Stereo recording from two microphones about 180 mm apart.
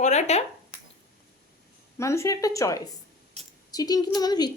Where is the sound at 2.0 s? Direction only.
15° left (ahead or behind).